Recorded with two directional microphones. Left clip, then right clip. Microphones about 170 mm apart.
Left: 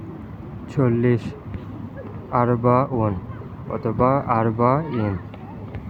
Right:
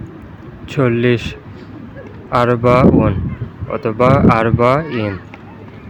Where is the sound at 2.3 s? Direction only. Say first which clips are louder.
Right 6 dB; 45° right (ahead or behind).